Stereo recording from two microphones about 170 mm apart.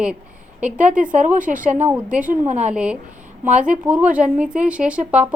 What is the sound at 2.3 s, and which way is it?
Speech, 45° right (ahead or behind).